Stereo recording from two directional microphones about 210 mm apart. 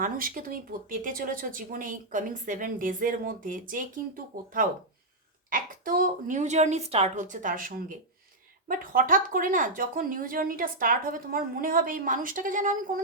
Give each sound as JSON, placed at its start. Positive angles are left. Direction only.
{"t": 0.0, "sound": "a woman's voice", "side_deg": -40}
{"t": 8.6, "sound": "a woman's voice", "side_deg": -40}